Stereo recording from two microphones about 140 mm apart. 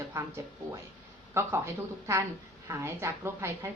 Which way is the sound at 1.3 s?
20° right (ahead or behind).